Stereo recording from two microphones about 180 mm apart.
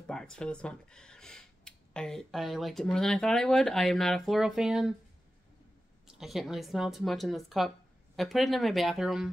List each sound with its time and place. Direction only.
0.0 s speech: 5° left (ahead or behind)
6.0 s speech: centre (ahead or behind)